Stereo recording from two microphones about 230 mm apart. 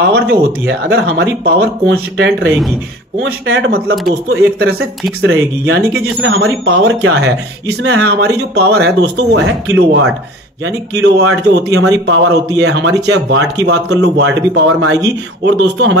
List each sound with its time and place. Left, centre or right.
0.1 s speech: right